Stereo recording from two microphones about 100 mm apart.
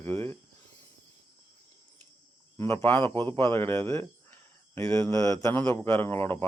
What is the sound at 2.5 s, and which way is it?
A man's voice, 25° left (ahead or behind).